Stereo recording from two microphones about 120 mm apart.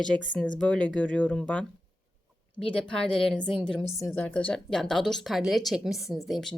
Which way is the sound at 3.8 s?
20° left (ahead or behind).